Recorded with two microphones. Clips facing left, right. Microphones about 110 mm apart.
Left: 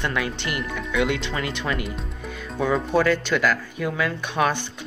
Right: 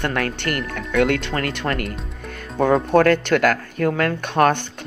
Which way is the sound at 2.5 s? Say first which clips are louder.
Right 5 dB; 45° right (ahead or behind).